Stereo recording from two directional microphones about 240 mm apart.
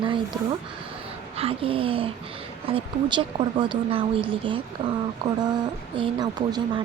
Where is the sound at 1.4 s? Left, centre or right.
Right.